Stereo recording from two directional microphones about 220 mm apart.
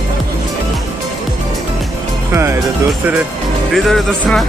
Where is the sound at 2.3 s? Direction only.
10° right (ahead or behind).